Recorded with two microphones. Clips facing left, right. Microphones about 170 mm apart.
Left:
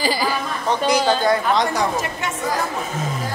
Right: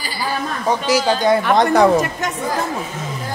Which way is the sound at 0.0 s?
90° left.